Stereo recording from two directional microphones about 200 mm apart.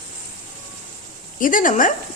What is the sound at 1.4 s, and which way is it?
Speech, 40° left (ahead or behind).